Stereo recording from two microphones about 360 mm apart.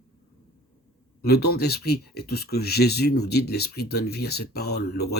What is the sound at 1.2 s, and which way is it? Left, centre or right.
Speech, left.